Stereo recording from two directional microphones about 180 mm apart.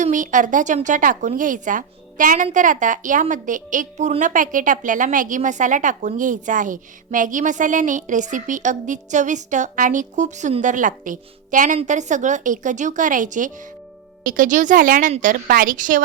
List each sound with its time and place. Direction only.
0.0 s speech: 45° right (ahead or behind)